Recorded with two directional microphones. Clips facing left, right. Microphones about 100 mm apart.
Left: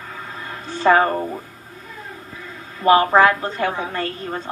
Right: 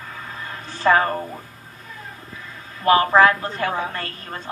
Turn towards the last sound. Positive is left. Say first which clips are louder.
# left 5 dB
turn(degrees=20)  # may be behind; listen again after turning